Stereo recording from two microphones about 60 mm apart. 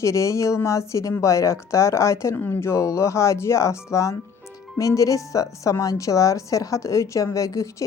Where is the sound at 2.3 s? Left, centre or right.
Left.